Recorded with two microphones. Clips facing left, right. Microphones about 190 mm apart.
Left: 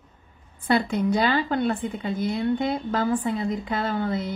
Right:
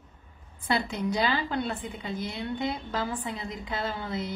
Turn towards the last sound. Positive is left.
turn(degrees=50)  # may be behind; listen again after turning